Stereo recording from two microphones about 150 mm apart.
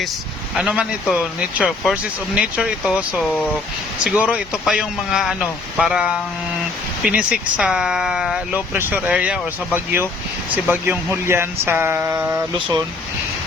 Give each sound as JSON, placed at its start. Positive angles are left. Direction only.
{"t": 0.6, "sound": "speech", "side_deg": -10}